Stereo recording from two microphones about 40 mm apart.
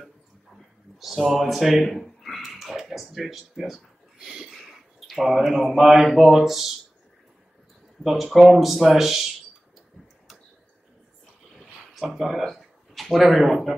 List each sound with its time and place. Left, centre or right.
0.9 s speech: centre
2.4 s speech: centre
4.2 s a sound: centre
5.0 s speech: centre
8.0 s speech: centre
11.5 s a sound: centre
12.5 s speech: centre